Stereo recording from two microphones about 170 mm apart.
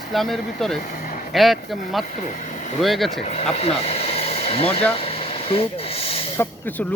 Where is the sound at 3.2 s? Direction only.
40° left (ahead or behind).